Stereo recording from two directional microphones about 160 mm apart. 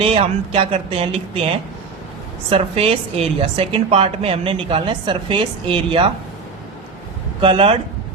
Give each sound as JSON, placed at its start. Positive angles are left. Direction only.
{"t": 0.0, "sound": "a woman's voice", "side_deg": -35}
{"t": 2.5, "sound": "a woman's voice", "side_deg": -35}
{"t": 7.4, "sound": "a woman's voice", "side_deg": -35}